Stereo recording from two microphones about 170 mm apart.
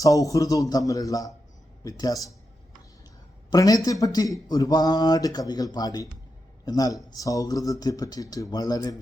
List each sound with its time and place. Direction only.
0.0 s speech: 20° left (ahead or behind)
3.5 s speech: 20° left (ahead or behind)